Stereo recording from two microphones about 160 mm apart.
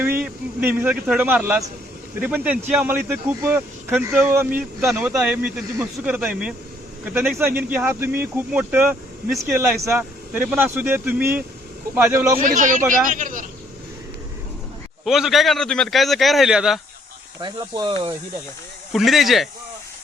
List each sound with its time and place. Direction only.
0.0 s speech: 10° right (ahead or behind)
12.4 s speech: 55° right (ahead or behind)
15.0 s a man's voice: centre (ahead or behind)
17.4 s speech: 30° right (ahead or behind)
18.9 s a man's voice: centre (ahead or behind)